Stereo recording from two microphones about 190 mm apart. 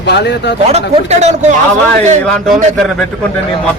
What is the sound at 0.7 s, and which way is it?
Speech, 35° right (ahead or behind).